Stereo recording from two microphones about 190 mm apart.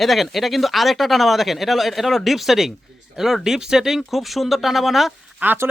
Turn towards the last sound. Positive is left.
turn(degrees=-10)  # may be behind; listen again after turning